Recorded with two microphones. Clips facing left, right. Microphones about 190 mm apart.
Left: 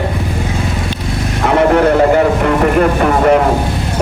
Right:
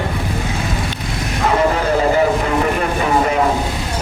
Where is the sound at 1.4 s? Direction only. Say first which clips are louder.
Left 6 dB; 65° left (ahead or behind).